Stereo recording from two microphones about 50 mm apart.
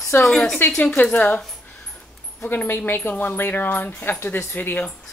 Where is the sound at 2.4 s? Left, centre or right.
Left.